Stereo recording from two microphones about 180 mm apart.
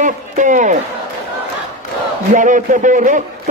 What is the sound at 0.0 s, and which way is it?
Speech, 45° right (ahead or behind).